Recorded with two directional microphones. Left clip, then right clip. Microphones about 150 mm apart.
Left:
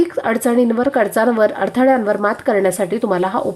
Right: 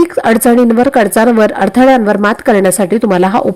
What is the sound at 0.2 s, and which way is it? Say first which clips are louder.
Sizzle: right 7 dB; 35° right (ahead or behind).